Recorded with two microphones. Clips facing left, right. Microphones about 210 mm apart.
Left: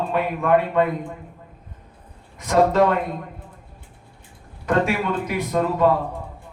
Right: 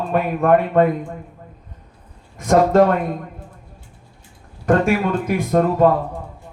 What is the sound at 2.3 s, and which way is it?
Speech, 50° right (ahead or behind).